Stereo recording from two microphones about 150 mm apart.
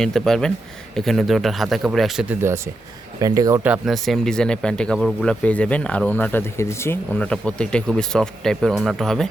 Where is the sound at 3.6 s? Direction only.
5° right (ahead or behind).